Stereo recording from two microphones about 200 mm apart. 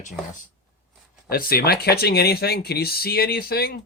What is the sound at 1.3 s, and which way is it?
Speech, 50° left (ahead or behind).